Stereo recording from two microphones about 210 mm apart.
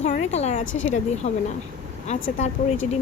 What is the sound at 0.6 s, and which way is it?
Speech, 65° left (ahead or behind).